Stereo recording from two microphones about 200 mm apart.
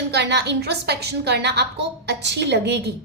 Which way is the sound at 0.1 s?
60° right (ahead or behind).